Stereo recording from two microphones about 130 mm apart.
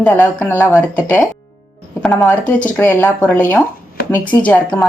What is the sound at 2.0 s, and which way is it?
Speech, centre (ahead or behind).